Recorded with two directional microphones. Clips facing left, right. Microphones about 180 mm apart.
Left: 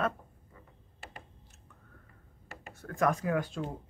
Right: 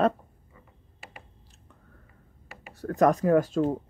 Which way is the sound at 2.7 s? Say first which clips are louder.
Right 7 dB; 40° right (ahead or behind).